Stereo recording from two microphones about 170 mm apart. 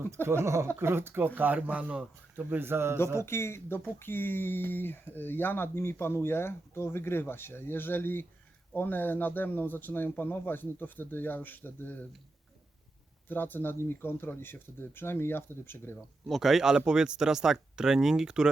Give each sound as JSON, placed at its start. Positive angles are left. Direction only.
{"t": 0.1, "sound": "a man's voice", "side_deg": -15}
{"t": 3.2, "sound": "speech", "side_deg": 15}
{"t": 13.2, "sound": "speech", "side_deg": 10}
{"t": 16.0, "sound": "speech", "side_deg": 0}